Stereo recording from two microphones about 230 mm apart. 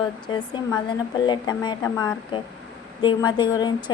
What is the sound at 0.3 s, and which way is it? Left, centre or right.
A woman's voice, centre.